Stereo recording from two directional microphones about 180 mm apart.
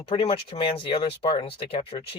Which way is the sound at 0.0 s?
30° left (ahead or behind).